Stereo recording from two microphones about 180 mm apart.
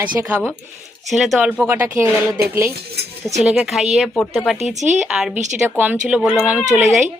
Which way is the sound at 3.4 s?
5° right (ahead or behind).